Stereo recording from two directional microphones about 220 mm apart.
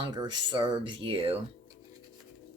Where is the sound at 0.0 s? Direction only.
20° right (ahead or behind).